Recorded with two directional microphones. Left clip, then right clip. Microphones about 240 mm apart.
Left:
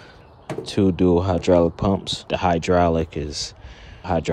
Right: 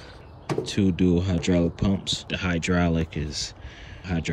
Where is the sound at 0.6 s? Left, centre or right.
Centre.